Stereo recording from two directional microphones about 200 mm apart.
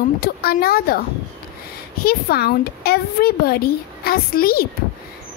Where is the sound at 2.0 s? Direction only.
50° left (ahead or behind).